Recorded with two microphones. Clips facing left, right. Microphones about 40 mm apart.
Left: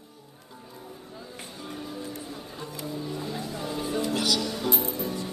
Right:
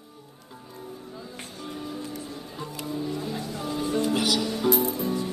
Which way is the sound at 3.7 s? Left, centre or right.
Centre.